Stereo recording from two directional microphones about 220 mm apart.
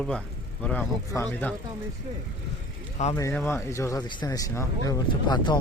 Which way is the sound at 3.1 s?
15° left (ahead or behind).